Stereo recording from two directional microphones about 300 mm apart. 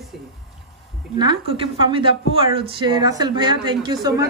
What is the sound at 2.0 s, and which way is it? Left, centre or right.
Speech, centre.